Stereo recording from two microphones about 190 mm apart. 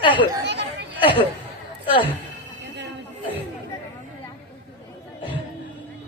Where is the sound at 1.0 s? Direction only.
30° left (ahead or behind).